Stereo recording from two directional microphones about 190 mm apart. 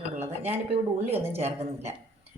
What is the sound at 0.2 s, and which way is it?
Dishes, 35° right (ahead or behind).